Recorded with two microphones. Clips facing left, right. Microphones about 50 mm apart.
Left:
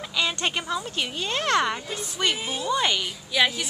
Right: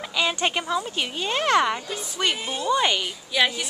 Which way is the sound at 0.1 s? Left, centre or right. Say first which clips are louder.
Right 2 dB; centre.